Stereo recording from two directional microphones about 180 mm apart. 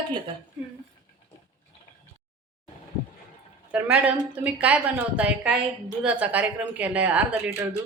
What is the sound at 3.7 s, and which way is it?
Speech, 10° right (ahead or behind).